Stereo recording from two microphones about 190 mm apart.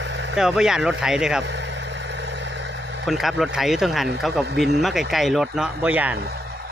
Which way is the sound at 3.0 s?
Centre (ahead or behind).